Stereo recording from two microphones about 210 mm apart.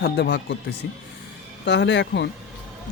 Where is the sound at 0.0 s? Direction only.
55° left (ahead or behind).